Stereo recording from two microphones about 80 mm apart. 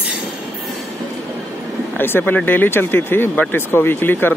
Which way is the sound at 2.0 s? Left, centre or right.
Left.